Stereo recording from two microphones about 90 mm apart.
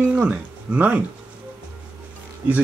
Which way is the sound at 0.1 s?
10° right (ahead or behind).